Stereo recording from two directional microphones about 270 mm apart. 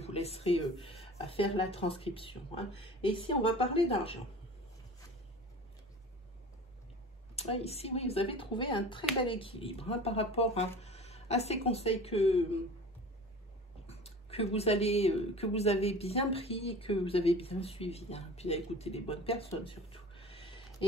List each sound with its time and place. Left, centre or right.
0.0 s speech: left
7.3 s speech: left
13.8 s speech: left
19.5 s a sound: centre